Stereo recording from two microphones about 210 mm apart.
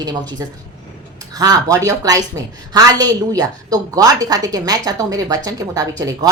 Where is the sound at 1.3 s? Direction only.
15° right (ahead or behind).